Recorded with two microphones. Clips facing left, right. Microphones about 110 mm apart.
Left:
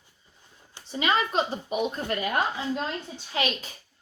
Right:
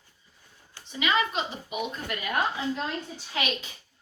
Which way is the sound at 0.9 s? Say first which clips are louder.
Left 1 dB; 35° left (ahead or behind).